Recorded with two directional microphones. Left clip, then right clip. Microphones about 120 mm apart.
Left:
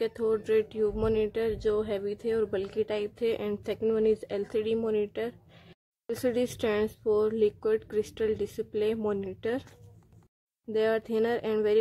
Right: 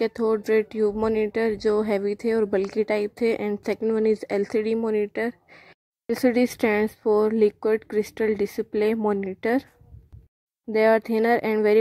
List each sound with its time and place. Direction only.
0.0 s speech: 50° right (ahead or behind)
4.8 s speech: 30° right (ahead or behind)
10.7 s speech: 45° right (ahead or behind)